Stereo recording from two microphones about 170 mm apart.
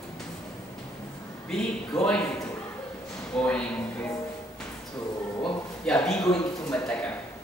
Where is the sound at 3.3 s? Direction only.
5° left (ahead or behind).